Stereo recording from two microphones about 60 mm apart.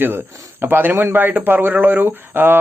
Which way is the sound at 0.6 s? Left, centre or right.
Right.